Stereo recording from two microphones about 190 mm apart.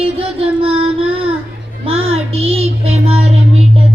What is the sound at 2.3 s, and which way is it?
Child singing, 30° right (ahead or behind).